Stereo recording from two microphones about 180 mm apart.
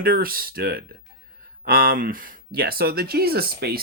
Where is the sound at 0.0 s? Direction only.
55° right (ahead or behind).